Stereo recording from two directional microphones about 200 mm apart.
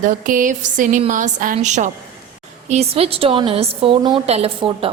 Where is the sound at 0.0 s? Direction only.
40° right (ahead or behind).